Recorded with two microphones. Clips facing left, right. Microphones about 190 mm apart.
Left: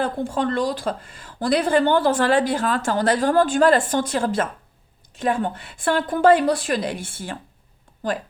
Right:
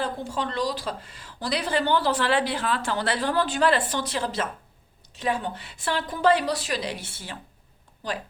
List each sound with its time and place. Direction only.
0.0 s speech: 55° left (ahead or behind)